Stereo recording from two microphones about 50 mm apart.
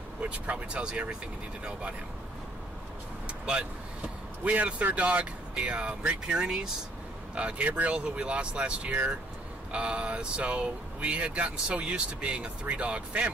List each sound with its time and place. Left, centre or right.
0.2 s speech: right
3.3 s vehicle: centre
4.5 s speech: right
7.3 s speech: right